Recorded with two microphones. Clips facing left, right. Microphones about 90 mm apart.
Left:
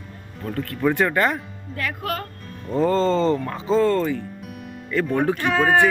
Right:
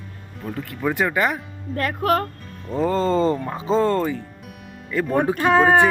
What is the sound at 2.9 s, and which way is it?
Speech, 15° right (ahead or behind).